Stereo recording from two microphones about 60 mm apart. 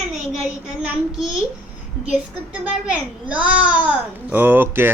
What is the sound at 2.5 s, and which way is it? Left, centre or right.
Speech, right.